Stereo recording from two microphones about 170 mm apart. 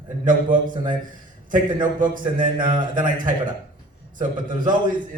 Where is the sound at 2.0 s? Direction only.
50° right (ahead or behind).